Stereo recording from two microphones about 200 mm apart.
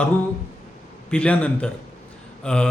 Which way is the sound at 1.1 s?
5° left (ahead or behind).